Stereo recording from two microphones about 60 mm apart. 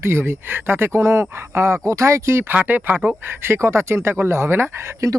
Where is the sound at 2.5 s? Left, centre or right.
Right.